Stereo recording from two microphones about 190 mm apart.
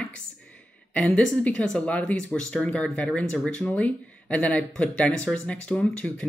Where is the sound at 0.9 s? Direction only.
5° left (ahead or behind).